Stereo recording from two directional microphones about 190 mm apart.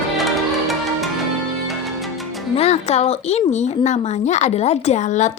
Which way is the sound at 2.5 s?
35° left (ahead or behind).